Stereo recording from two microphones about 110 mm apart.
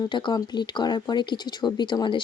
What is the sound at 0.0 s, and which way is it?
Speech, 45° left (ahead or behind).